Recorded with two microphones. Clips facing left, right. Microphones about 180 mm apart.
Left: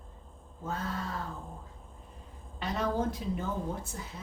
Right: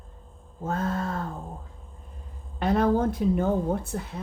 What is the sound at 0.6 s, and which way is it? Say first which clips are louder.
Speech: right 8 dB; 50° right (ahead or behind).